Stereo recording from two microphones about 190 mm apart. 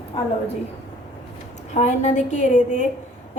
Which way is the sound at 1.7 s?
35° left (ahead or behind).